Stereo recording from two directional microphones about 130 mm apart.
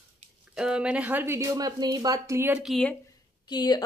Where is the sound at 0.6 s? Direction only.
5° right (ahead or behind).